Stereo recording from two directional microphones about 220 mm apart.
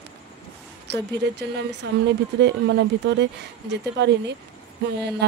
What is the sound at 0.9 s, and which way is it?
Speech, 50° right (ahead or behind).